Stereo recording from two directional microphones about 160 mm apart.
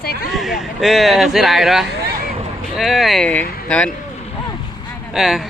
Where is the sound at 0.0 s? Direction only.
75° left (ahead or behind).